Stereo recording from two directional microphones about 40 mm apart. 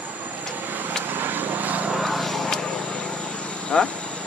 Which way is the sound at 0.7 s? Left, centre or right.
Right.